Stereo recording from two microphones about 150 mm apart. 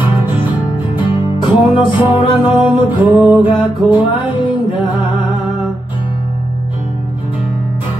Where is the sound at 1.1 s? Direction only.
35° left (ahead or behind).